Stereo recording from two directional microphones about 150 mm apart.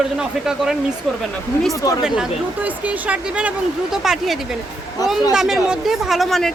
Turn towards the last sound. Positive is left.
turn(degrees=0)  # may be behind; listen again after turning